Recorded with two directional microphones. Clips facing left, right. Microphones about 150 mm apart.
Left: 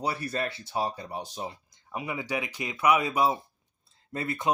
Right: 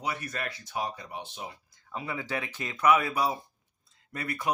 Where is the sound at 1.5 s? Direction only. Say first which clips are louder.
Left 4 dB; 15° left (ahead or behind).